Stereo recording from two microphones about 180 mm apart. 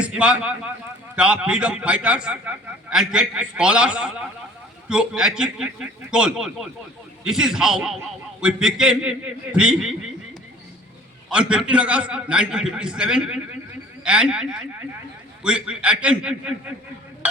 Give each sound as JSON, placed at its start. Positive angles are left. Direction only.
{"t": 0.0, "sound": "a man's voice", "side_deg": -5}
{"t": 11.3, "sound": "a man's voice", "side_deg": -5}
{"t": 15.4, "sound": "a man's voice", "side_deg": -5}